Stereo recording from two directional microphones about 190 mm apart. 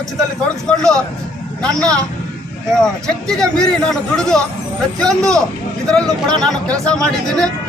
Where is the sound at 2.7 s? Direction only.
5° left (ahead or behind).